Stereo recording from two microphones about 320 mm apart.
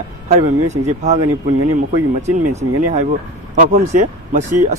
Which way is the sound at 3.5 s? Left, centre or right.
Right.